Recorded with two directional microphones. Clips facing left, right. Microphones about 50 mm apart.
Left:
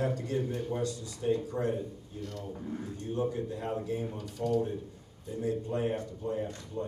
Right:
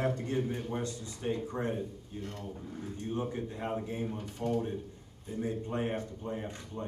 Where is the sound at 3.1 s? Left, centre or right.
Right.